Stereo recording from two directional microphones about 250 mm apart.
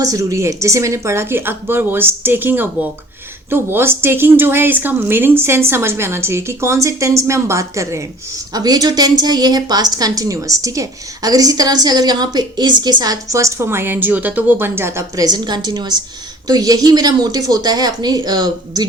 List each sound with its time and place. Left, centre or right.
0.0 s a woman's voice: centre